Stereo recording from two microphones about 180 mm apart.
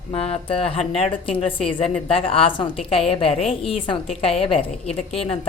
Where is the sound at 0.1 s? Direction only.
30° left (ahead or behind).